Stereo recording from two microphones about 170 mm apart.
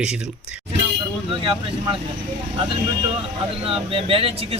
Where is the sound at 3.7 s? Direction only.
30° right (ahead or behind).